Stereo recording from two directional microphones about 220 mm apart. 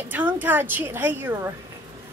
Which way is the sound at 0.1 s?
10° right (ahead or behind).